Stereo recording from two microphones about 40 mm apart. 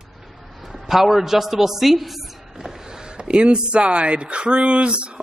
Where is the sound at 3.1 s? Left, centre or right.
Right.